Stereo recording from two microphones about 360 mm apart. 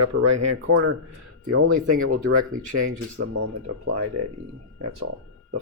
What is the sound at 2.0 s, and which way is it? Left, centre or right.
Speech, right.